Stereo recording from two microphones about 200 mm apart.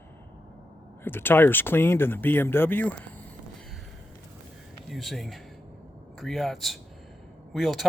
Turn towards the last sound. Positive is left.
turn(degrees=0)  # may be behind; listen again after turning